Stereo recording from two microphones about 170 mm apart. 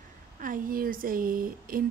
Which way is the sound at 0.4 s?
55° right (ahead or behind).